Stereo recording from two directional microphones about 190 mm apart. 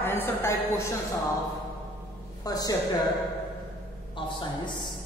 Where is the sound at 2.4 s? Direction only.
20° left (ahead or behind).